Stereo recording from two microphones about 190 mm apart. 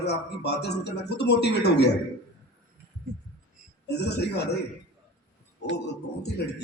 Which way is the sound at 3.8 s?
60° left (ahead or behind).